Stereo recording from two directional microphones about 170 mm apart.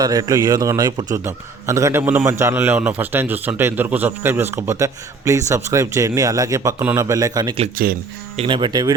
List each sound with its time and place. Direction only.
0.0 s a man's voice: 20° right (ahead or behind)
7.8 s speech: 55° right (ahead or behind)
8.4 s speech: 30° right (ahead or behind)